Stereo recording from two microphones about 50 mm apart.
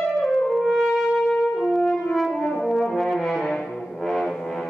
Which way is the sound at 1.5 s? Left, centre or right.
Centre.